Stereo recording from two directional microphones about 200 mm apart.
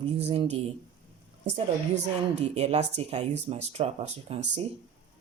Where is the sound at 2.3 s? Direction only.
30° right (ahead or behind).